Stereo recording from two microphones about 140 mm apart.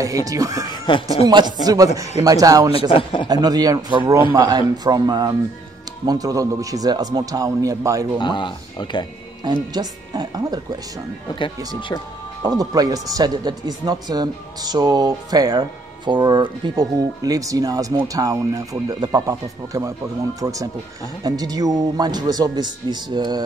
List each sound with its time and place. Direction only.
0.0 s speech: 25° right (ahead or behind)
0.9 s speech: 35° left (ahead or behind)
1.2 s speech: 30° right (ahead or behind)
2.9 s speech: 40° left (ahead or behind)
3.3 s speech: 30° right (ahead or behind)
8.2 s speech: 35° left (ahead or behind)
9.4 s speech: 30° right (ahead or behind)
12.4 s speech: 25° right (ahead or behind)